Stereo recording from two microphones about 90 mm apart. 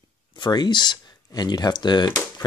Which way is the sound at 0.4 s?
55° left (ahead or behind).